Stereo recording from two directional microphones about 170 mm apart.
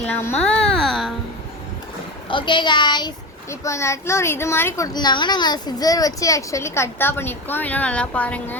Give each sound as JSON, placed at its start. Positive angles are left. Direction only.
{"t": 0.0, "sound": "music", "side_deg": 10}
{"t": 2.3, "sound": "a woman's voice", "side_deg": 30}
{"t": 4.9, "sound": "a woman's voice", "side_deg": 25}